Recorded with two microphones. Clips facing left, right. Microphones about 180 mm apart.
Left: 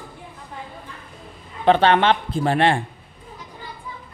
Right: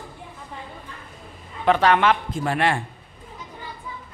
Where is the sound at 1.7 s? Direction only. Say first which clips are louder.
Left 2 dB; 30° left (ahead or behind).